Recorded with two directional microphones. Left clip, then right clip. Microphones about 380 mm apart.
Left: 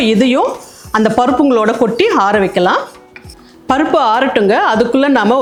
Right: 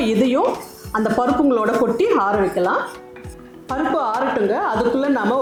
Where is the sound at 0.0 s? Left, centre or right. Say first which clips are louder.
Left 6 dB; left.